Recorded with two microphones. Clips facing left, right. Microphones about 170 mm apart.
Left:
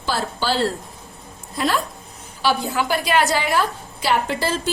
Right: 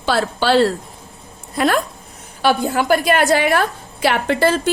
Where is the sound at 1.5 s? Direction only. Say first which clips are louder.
Right 5 dB; 55° right (ahead or behind).